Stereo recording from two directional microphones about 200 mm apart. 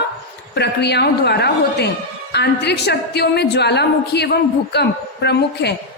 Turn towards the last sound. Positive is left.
turn(degrees=55)  # may be behind; listen again after turning